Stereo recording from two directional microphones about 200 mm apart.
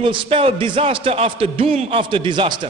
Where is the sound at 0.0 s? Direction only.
25° right (ahead or behind).